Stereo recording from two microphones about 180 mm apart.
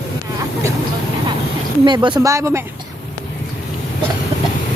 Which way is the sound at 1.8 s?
25° right (ahead or behind).